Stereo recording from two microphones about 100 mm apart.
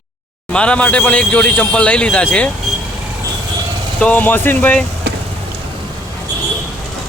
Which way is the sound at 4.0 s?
15° left (ahead or behind).